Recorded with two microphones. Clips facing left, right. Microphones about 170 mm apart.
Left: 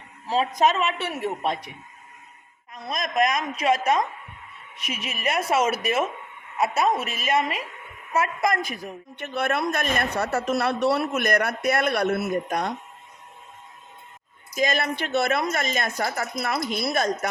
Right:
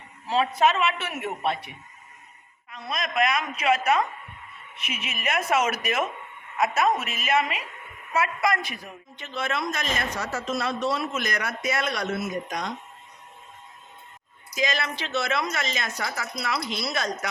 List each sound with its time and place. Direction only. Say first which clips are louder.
0.3 s a man's voice: left 1 dB; 40° left (ahead or behind)
2.9 s a man's voice: left 2 dB; 40° left (ahead or behind)
9.1 s speech: left 4 dB; 60° left (ahead or behind)
14.5 s a woman's voice: left 4 dB; 50° left (ahead or behind)